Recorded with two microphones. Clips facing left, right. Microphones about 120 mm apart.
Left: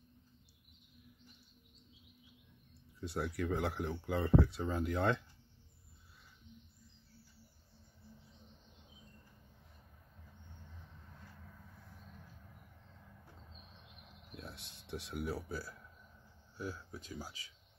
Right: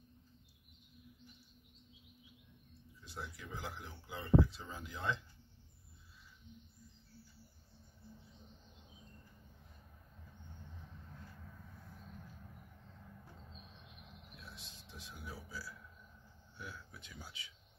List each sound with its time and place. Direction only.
3.0 s speech: 65° left (ahead or behind)
14.3 s a sound: 60° left (ahead or behind)
16.5 s speech: 40° left (ahead or behind)